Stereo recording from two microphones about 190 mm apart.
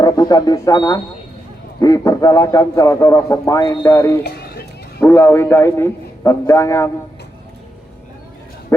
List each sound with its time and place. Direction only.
0.0 s a man's voice: 20° left (ahead or behind)
4.2 s run: 55° left (ahead or behind)
4.9 s a man's voice: 10° left (ahead or behind)